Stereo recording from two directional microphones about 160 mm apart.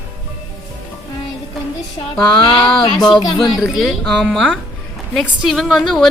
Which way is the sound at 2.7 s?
Centre (ahead or behind).